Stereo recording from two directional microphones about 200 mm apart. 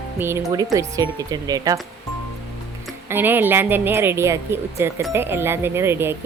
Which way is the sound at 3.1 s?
10° right (ahead or behind).